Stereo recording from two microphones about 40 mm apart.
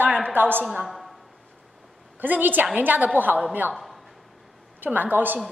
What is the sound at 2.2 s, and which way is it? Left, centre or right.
A woman's voice, right.